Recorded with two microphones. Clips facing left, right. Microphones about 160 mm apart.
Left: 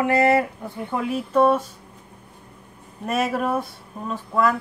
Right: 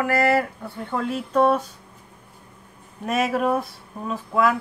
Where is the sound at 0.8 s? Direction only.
10° left (ahead or behind).